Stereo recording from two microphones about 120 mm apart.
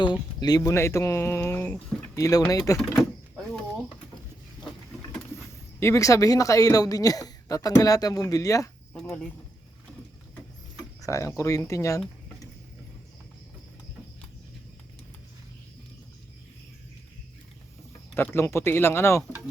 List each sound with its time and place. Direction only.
0.0 s speech: 35° left (ahead or behind); by 1.8 s 20° left (ahead or behind)
2.1 s speech: 30° left (ahead or behind)
3.0 s door: 5° left (ahead or behind)
5.8 s speech: 25° left (ahead or behind)
8.9 s speech: 5° left (ahead or behind)
11.0 s speech: 25° left (ahead or behind)
18.1 s speech: 20° left (ahead or behind)